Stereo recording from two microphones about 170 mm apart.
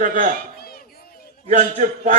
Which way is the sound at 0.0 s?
50° right (ahead or behind).